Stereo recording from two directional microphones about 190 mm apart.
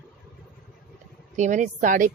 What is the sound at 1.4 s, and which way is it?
Speech, 40° right (ahead or behind).